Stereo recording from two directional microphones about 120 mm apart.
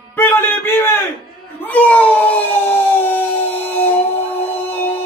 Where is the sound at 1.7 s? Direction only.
10° left (ahead or behind).